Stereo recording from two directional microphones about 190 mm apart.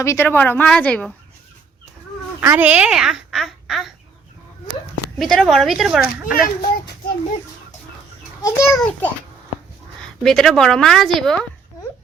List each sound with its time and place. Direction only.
0.0 s a woman's voice: 15° left (ahead or behind)
2.4 s speech: 10° right (ahead or behind)
5.2 s a woman's voice: centre (ahead or behind)
6.3 s a child's voice: 50° left (ahead or behind)
8.4 s a child's voice: 15° left (ahead or behind)
8.7 s a woman's voice: 5° left (ahead or behind)
10.2 s a woman's voice: centre (ahead or behind)